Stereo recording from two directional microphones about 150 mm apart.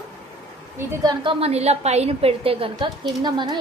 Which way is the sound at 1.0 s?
30° right (ahead or behind).